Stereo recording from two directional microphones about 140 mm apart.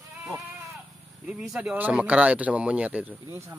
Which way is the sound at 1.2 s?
5° right (ahead or behind).